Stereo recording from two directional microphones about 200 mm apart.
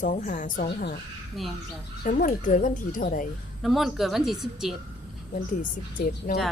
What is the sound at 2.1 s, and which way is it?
A woman's voice, 45° left (ahead or behind).